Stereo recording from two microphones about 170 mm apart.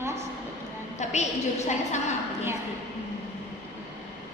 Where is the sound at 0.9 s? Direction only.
40° left (ahead or behind).